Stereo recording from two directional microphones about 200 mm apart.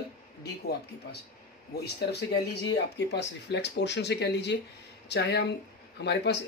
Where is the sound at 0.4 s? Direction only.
55° left (ahead or behind).